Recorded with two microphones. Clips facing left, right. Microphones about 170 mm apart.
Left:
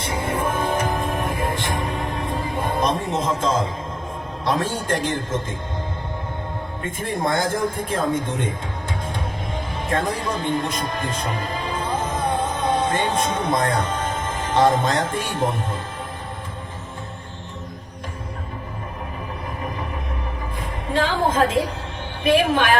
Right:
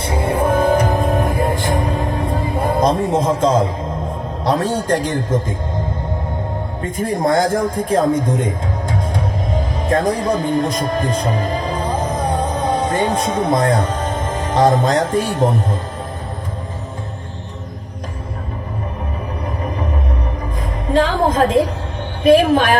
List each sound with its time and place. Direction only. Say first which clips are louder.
0.0 s music: right 6 dB; 30° right (ahead or behind)
4.5 s speech: right 7 dB; 40° right (ahead or behind)
6.9 s speech: right 7 dB; 40° right (ahead or behind)
10.0 s speech: right 7 dB; 40° right (ahead or behind)
20.9 s a woman's voice: right 5 dB; 40° right (ahead or behind)